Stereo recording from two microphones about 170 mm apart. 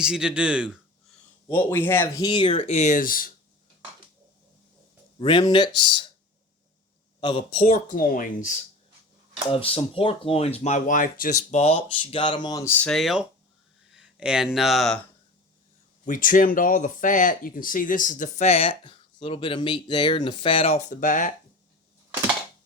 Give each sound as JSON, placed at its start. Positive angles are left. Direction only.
{"t": 0.0, "sound": "speech", "side_deg": -5}
{"t": 1.5, "sound": "speech", "side_deg": 10}
{"t": 2.2, "sound": "speech", "side_deg": 30}
{"t": 5.2, "sound": "speech", "side_deg": 30}
{"t": 7.2, "sound": "speech", "side_deg": 30}
{"t": 7.9, "sound": "speech", "side_deg": 55}
{"t": 9.5, "sound": "speech", "side_deg": 35}
{"t": 12.6, "sound": "speech", "side_deg": 10}
{"t": 16.0, "sound": "speech", "side_deg": 50}